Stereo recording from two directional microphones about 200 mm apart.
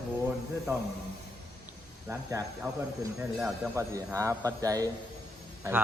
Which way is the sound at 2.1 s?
15° right (ahead or behind).